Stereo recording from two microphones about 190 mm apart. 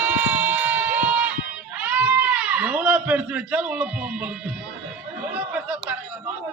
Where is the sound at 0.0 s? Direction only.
10° right (ahead or behind).